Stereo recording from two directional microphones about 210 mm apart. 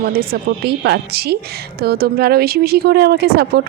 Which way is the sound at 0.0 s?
45° right (ahead or behind).